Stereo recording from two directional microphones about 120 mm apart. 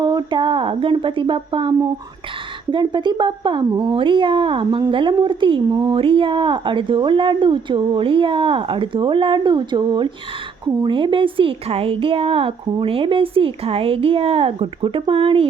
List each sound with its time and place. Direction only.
0.0 s a woman's voice: 35° right (ahead or behind)
6.0 s speech: 50° right (ahead or behind)